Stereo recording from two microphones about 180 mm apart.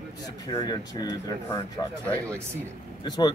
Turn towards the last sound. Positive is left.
turn(degrees=20)  # may be behind; listen again after turning